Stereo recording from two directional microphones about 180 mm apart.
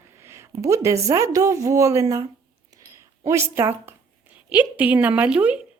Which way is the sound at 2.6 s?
15° right (ahead or behind).